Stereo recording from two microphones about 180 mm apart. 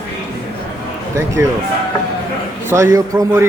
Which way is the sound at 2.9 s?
20° right (ahead or behind).